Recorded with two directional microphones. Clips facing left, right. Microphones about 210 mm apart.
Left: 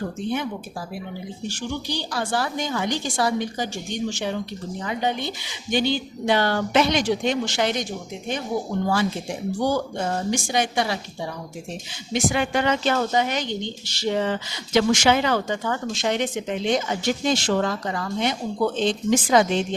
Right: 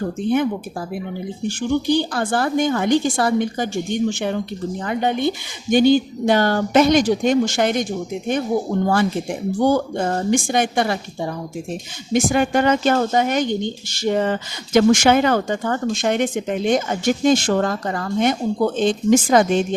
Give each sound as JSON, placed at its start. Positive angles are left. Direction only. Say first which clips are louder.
{"t": 1.5, "sound": "speech", "louder": "right 11 dB", "side_deg": -55}
{"t": 9.6, "sound": "speech", "louder": "right 6 dB", "side_deg": -55}